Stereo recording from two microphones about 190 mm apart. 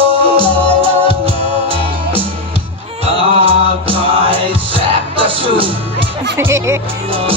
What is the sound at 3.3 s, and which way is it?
Music, 30° right (ahead or behind).